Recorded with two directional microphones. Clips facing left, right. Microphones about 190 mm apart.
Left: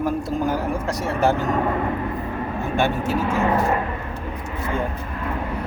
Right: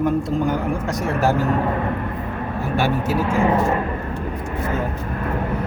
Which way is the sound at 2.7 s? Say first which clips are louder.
Right 1 dB; 5° right (ahead or behind).